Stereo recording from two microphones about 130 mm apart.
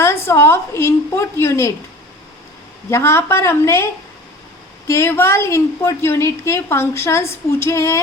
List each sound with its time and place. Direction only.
0.0 s a woman's voice: 20° left (ahead or behind)
2.9 s a woman's voice: 20° left (ahead or behind)
4.9 s a woman's voice: 20° left (ahead or behind)